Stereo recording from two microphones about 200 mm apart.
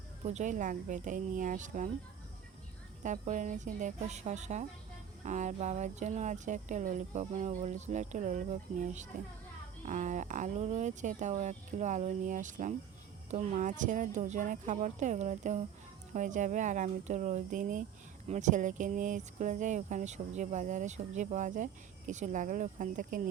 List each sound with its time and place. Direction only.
0.3 s speech: 35° right (ahead or behind)
3.0 s speech: 40° right (ahead or behind)